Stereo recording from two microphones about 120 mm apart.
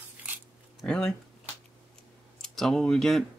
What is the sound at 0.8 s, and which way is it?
Speech, 5° left (ahead or behind).